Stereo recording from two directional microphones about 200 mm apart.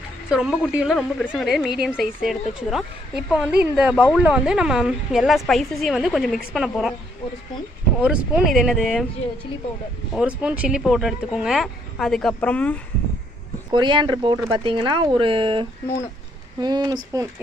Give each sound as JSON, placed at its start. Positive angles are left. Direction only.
{"t": 0.3, "sound": "a woman's voice", "side_deg": -5}
{"t": 8.0, "sound": "a woman's voice", "side_deg": -5}
{"t": 10.2, "sound": "a woman's voice", "side_deg": -5}
{"t": 13.7, "sound": "speech", "side_deg": -20}